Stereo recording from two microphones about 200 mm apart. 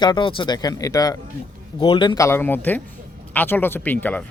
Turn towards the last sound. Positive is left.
turn(degrees=10)  # may be behind; listen again after turning